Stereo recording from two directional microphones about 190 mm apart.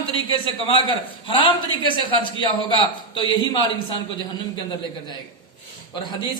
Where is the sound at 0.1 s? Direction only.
30° left (ahead or behind).